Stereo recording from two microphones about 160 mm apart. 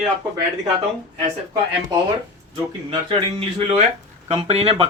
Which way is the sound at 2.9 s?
35° right (ahead or behind).